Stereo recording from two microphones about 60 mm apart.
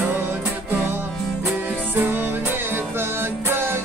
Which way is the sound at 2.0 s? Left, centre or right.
Right.